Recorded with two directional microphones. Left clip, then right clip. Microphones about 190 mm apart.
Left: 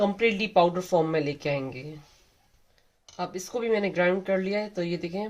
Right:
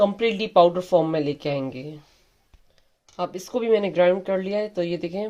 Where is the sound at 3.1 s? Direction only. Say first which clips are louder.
Right 4 dB; 35° right (ahead or behind).